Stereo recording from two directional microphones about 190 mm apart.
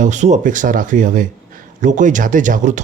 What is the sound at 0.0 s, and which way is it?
Speech, 40° right (ahead or behind).